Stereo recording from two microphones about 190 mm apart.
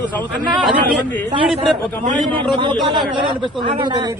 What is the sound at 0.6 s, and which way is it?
Speech, 5° left (ahead or behind).